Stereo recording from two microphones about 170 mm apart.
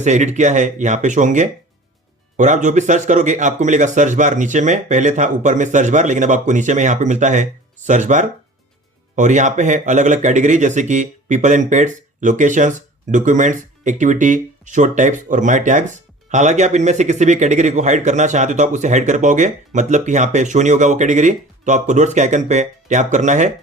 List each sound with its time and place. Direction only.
0.0 s speech: 45° right (ahead or behind)